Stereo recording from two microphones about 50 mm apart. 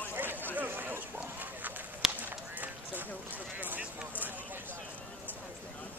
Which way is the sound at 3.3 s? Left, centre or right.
Right.